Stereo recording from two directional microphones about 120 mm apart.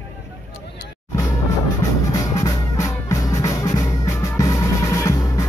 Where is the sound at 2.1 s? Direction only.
30° left (ahead or behind).